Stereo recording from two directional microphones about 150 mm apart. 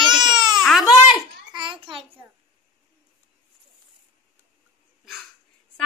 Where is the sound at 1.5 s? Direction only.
30° right (ahead or behind).